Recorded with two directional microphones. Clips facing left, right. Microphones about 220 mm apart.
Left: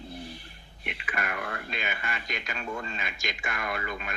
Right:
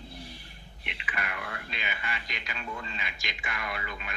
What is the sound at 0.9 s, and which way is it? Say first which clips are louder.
Speech: left 4 dB; 45° left (ahead or behind).